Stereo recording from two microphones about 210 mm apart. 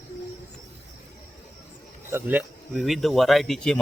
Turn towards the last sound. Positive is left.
turn(degrees=0)  # may be behind; listen again after turning